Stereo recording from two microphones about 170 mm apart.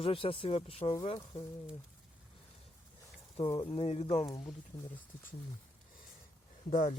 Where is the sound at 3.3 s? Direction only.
35° left (ahead or behind).